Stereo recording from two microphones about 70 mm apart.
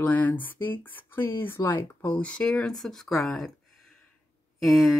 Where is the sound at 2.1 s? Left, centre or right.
Centre.